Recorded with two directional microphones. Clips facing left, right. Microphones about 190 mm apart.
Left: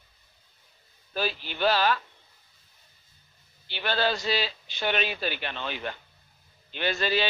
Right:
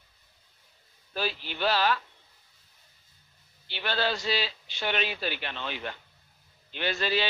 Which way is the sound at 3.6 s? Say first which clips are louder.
Left 2 dB; 50° left (ahead or behind).